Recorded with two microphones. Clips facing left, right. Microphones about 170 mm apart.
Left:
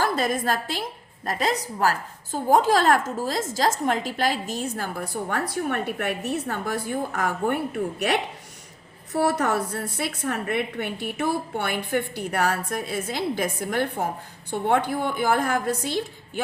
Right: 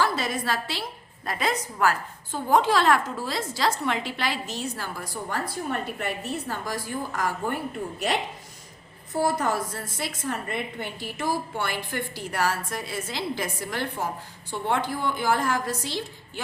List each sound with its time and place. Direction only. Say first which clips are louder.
0.0 s a woman's voice: left 2 dB; 50° left (ahead or behind)